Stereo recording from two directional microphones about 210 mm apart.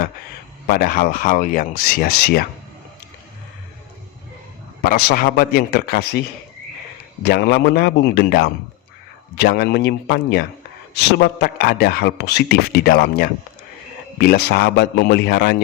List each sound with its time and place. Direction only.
0.7 s a man's voice: 45° left (ahead or behind)
4.8 s a man's voice: 45° left (ahead or behind)